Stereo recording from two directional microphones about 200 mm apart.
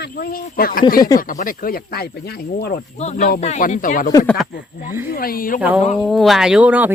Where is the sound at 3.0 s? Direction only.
35° left (ahead or behind).